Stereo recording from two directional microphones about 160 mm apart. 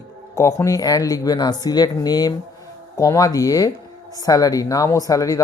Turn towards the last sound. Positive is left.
turn(degrees=20)  # may be behind; listen again after turning